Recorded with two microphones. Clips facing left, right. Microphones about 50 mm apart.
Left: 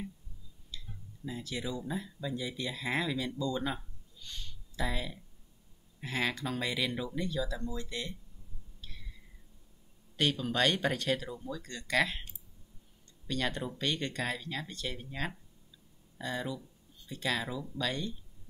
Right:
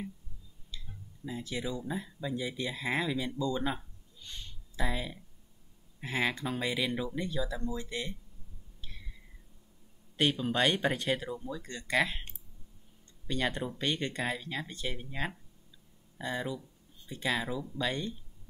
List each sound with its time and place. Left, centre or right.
0.7 s speech: centre
8.8 s a sound: centre
10.1 s speech: centre
13.3 s speech: centre